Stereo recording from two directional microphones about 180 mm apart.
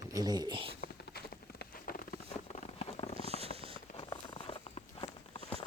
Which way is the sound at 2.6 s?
35° left (ahead or behind).